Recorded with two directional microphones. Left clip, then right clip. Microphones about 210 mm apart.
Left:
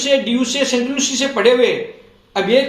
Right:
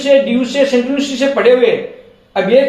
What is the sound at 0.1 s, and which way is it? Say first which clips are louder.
Speech: right 6 dB; 35° left (ahead or behind).